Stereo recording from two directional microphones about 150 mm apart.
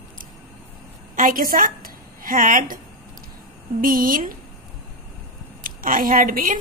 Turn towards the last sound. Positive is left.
turn(degrees=-70)  # may be behind; listen again after turning